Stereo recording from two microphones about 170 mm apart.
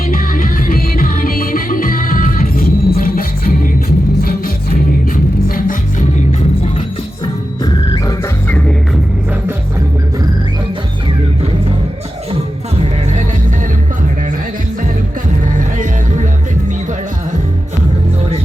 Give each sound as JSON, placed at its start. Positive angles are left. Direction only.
{"t": 0.1, "sound": "music", "side_deg": 55}
{"t": 7.6, "sound": "music", "side_deg": 20}
{"t": 12.3, "sound": "music", "side_deg": -35}
{"t": 15.5, "sound": "music", "side_deg": -50}